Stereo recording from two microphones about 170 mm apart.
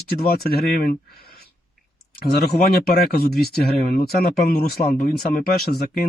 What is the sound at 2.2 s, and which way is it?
Speech, 65° left (ahead or behind).